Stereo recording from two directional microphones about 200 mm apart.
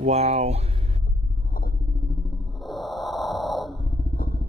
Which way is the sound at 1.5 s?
45° left (ahead or behind).